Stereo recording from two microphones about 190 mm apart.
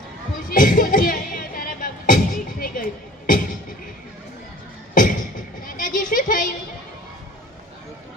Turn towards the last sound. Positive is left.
turn(degrees=45)  # may be behind; listen again after turning